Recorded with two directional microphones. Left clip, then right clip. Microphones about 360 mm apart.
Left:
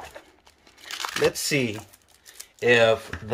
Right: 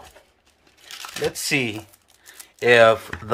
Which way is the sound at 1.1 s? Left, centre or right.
Centre.